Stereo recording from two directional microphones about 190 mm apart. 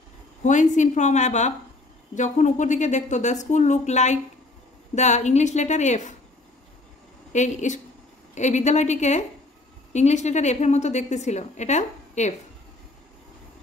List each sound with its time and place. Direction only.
0.4 s a woman's voice: 40° left (ahead or behind)
7.3 s a woman's voice: 40° left (ahead or behind)